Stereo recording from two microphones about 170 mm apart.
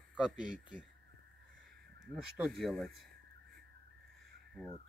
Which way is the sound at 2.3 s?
Centre (ahead or behind).